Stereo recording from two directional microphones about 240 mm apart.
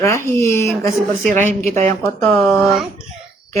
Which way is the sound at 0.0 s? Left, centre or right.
Centre.